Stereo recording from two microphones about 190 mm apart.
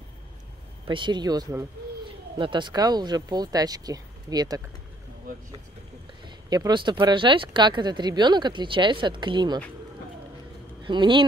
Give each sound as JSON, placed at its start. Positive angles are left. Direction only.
{"t": 0.8, "sound": "speech", "side_deg": -25}
{"t": 6.2, "sound": "speech", "side_deg": -20}
{"t": 10.8, "sound": "speech", "side_deg": -25}